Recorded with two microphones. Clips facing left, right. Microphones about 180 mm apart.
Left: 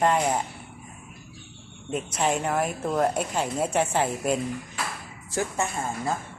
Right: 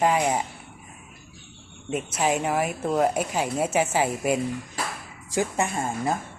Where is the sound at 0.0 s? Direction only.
5° right (ahead or behind).